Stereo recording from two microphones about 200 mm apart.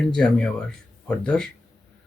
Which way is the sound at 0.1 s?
5° left (ahead or behind).